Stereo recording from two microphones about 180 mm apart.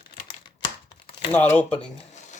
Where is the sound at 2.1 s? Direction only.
40° left (ahead or behind).